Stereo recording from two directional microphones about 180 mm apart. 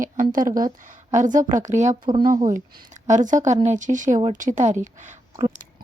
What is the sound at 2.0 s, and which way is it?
Speech, 25° right (ahead or behind).